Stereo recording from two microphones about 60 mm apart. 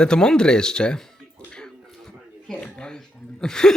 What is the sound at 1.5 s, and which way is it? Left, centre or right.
Music, centre.